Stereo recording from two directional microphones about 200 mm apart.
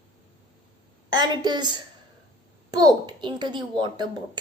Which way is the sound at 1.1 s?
20° right (ahead or behind).